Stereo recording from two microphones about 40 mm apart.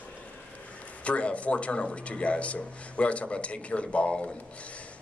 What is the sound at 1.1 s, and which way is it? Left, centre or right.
Speech, left.